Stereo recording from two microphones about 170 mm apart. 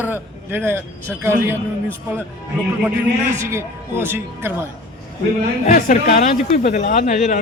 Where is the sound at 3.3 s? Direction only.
15° right (ahead or behind).